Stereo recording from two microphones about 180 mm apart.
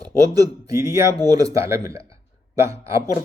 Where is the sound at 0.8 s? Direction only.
20° right (ahead or behind).